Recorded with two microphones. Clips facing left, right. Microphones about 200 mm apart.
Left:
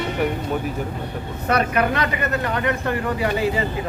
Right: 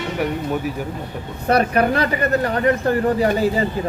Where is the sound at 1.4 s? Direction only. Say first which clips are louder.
Right 3 dB; 35° right (ahead or behind).